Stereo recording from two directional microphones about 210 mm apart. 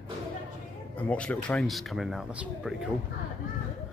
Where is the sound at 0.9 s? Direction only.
5° left (ahead or behind).